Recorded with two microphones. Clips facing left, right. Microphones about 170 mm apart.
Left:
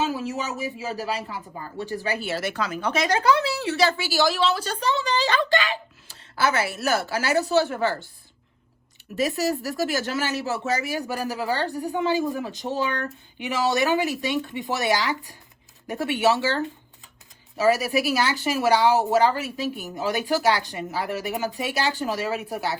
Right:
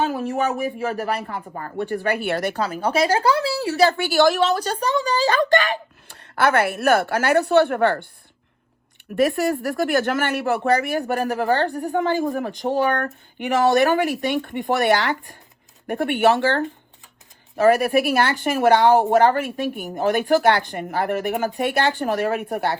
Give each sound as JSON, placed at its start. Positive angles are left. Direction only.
{"t": 0.0, "sound": "speech", "side_deg": -55}
{"t": 2.5, "sound": "speech", "side_deg": -35}
{"t": 3.9, "sound": "speech", "side_deg": -55}
{"t": 9.1, "sound": "speech", "side_deg": -55}